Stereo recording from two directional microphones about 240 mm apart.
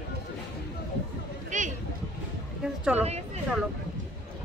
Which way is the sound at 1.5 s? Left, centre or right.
Right.